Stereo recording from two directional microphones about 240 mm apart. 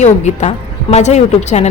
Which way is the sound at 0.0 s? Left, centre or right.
Left.